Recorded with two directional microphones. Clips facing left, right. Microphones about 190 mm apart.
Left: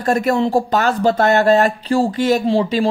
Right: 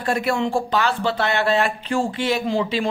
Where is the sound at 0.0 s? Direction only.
45° left (ahead or behind).